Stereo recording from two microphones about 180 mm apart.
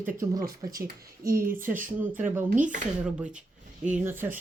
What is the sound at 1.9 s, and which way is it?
Speech, 10° right (ahead or behind).